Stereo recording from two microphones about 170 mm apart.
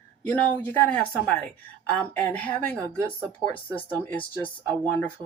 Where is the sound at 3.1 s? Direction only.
15° right (ahead or behind).